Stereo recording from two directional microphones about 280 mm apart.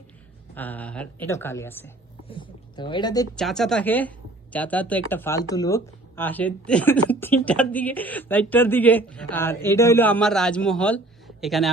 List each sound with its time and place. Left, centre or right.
0.5 s speech: centre
3.3 s speech: centre